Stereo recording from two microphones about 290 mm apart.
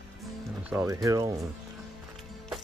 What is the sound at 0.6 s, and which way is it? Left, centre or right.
Speech, centre.